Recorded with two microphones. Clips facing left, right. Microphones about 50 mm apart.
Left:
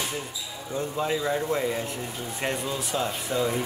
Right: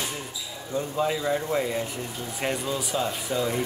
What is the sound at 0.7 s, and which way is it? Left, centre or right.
Speech, centre.